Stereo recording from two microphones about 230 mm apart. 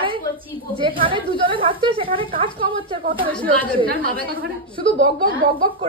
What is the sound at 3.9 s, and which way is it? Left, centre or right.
Speech, right.